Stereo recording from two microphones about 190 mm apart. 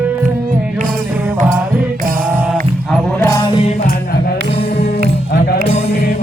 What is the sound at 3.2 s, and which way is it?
Music, 15° left (ahead or behind).